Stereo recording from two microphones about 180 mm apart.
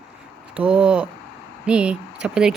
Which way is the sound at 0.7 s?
5° right (ahead or behind).